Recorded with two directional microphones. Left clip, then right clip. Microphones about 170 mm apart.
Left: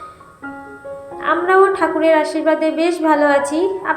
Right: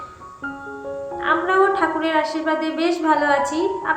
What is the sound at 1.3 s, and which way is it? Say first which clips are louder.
A woman's voice: left 4 dB; 20° left (ahead or behind).